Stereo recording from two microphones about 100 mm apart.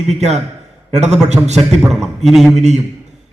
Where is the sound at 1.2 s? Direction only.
90° right.